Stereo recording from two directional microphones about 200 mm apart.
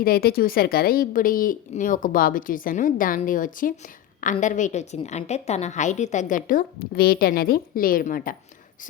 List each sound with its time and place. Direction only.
0.0 s a woman's voice: 50° left (ahead or behind)